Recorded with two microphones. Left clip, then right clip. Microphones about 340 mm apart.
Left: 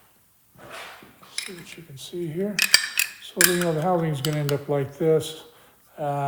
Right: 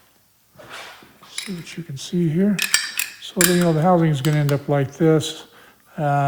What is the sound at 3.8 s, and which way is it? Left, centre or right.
Speech, right.